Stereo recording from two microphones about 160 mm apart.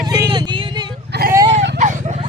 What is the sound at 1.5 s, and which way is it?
Vehicle, 90° right.